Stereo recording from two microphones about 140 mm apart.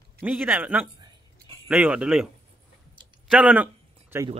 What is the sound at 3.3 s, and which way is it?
Speech, 10° right (ahead or behind).